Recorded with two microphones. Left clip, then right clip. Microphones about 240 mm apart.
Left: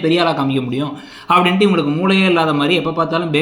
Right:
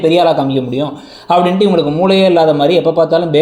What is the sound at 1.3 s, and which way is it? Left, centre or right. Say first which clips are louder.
Speech: right 3 dB; centre.